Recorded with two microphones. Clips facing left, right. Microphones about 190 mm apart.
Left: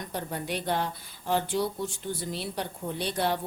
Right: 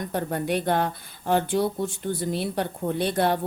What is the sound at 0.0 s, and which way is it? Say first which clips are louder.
Speech: right 7 dB; 55° right (ahead or behind).